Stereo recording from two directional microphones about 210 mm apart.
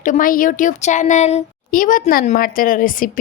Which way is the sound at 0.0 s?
40° left (ahead or behind).